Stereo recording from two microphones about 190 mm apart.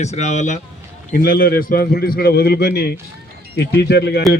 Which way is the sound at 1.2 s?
50° left (ahead or behind).